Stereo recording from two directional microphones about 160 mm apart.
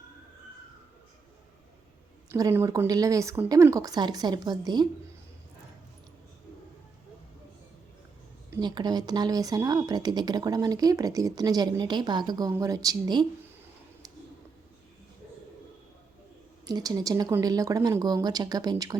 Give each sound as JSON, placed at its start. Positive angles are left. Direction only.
{"t": 2.3, "sound": "speech", "side_deg": -15}
{"t": 8.6, "sound": "speech", "side_deg": -25}
{"t": 16.6, "sound": "speech", "side_deg": -25}